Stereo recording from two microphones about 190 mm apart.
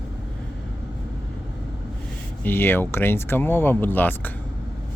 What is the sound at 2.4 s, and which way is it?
Speech, 10° left (ahead or behind).